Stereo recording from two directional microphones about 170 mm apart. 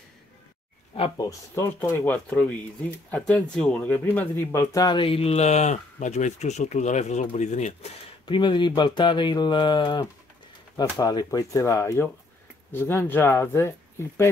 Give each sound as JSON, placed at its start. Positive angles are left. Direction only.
{"t": 1.1, "sound": "speech", "side_deg": 20}
{"t": 8.3, "sound": "speech", "side_deg": 30}